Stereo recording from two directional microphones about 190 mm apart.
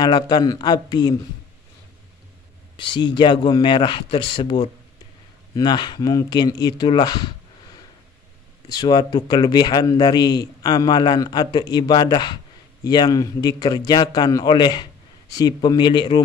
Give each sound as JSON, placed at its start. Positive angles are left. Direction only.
{"t": 0.0, "sound": "speech", "side_deg": 20}
{"t": 2.9, "sound": "speech", "side_deg": 25}
{"t": 8.6, "sound": "speech", "side_deg": 20}